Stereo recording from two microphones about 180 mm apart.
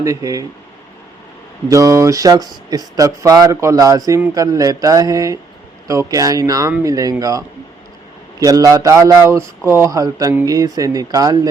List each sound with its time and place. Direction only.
0.0 s speech: 20° right (ahead or behind)
1.7 s speech: 20° right (ahead or behind)